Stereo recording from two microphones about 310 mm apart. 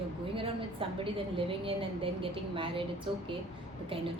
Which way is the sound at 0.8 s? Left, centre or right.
Centre.